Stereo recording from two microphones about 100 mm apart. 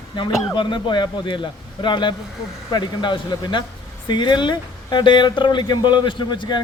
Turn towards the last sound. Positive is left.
turn(degrees=50)  # may be behind; listen again after turning